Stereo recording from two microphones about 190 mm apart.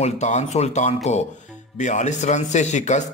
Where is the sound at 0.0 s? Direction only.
35° left (ahead or behind).